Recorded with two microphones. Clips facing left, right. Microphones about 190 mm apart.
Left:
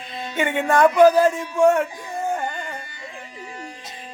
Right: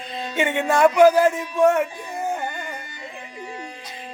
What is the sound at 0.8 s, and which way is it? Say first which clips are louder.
Music: even; 10° right (ahead or behind).